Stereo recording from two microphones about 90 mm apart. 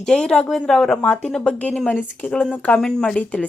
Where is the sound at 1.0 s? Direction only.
20° left (ahead or behind).